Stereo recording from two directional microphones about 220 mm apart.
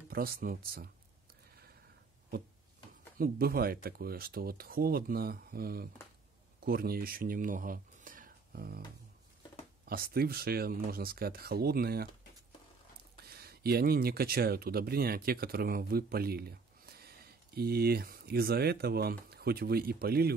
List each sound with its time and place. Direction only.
0.1 s speech: 45° right (ahead or behind)
3.2 s speech: 45° right (ahead or behind)
9.8 s speech: 45° right (ahead or behind)
13.1 s speech: 45° right (ahead or behind)